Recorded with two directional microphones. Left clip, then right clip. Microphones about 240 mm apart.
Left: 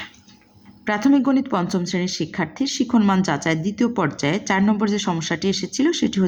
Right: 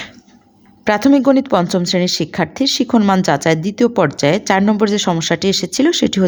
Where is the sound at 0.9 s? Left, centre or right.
Right.